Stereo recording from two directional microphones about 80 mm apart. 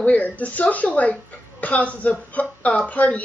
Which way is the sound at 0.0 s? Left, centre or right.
Centre.